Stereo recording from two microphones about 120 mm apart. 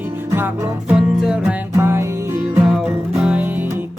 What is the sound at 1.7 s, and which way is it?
Music, 20° right (ahead or behind).